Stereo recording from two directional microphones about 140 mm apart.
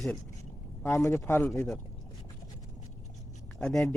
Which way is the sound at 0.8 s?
20° left (ahead or behind).